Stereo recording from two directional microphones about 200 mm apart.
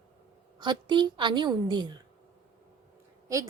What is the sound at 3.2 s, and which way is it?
Speech, 15° right (ahead or behind).